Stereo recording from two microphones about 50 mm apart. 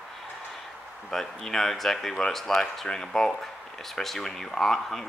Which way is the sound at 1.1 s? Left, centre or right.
Centre.